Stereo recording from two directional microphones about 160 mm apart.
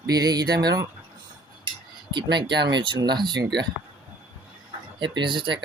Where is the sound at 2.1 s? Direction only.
30° right (ahead or behind).